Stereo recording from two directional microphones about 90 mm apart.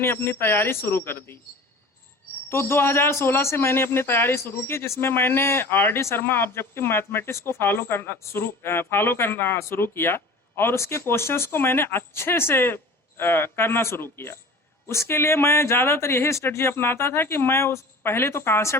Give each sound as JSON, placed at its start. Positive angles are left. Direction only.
{"t": 0.0, "sound": "a man's voice", "side_deg": 25}
{"t": 2.5, "sound": "a man's voice", "side_deg": 30}